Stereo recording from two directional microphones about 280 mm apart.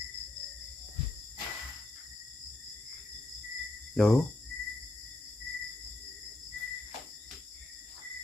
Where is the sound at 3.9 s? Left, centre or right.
Centre.